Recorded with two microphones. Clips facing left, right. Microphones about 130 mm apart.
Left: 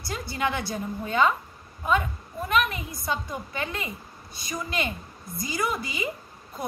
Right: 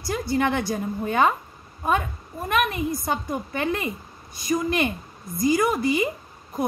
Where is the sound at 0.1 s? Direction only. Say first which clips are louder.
Right 6 dB; 55° right (ahead or behind).